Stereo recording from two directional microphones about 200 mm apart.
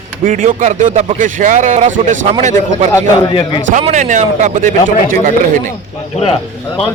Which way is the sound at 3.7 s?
35° right (ahead or behind).